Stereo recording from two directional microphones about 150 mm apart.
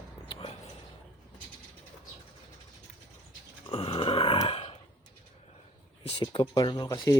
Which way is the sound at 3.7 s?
40° left (ahead or behind).